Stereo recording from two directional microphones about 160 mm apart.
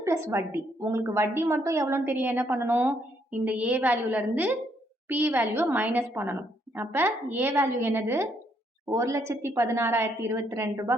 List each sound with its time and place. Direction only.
0.0 s a woman's voice: 15° right (ahead or behind)